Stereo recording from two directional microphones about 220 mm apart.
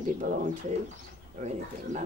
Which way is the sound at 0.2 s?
35° right (ahead or behind).